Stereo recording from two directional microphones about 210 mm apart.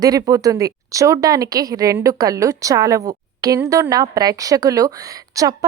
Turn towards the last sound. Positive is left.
turn(degrees=-15)  # may be behind; listen again after turning